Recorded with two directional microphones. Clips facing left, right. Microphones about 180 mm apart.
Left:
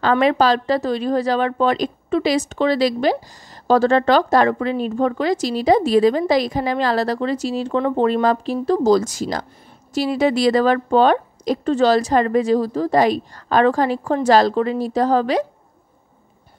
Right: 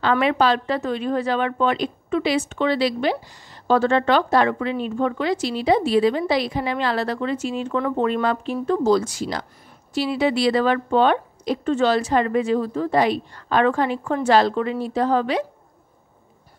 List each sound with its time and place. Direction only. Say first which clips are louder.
0.0 s speech: left 3 dB; 35° left (ahead or behind)